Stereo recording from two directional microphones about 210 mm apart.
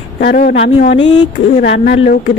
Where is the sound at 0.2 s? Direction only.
45° left (ahead or behind).